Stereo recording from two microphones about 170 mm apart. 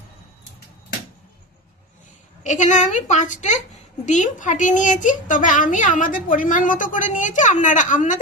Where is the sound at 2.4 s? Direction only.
45° left (ahead or behind).